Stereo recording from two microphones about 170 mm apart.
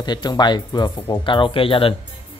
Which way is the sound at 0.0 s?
25° left (ahead or behind).